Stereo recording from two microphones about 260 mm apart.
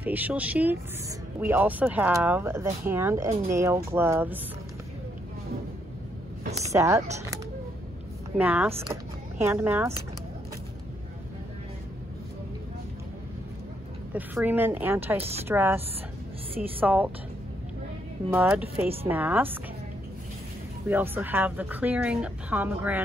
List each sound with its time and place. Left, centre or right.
0.0 s speech: centre
6.4 s a sound: right
6.7 s speech: centre
8.4 s speech: centre
14.1 s speech: centre
16.8 s speech: centre
18.8 s speech: centre
20.9 s speech: centre